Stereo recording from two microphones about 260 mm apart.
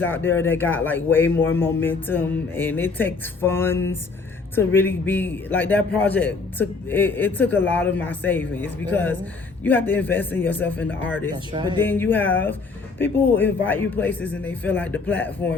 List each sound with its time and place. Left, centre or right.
0.0 s a man's voice: centre
11.5 s speech: centre
11.8 s a man's voice: centre